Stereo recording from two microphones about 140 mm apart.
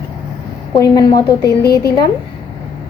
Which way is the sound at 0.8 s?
25° left (ahead or behind).